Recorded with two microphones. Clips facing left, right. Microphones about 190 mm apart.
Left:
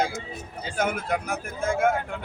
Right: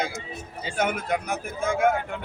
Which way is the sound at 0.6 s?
5° left (ahead or behind).